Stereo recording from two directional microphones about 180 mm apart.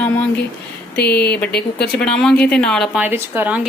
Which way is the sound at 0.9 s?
60° left (ahead or behind).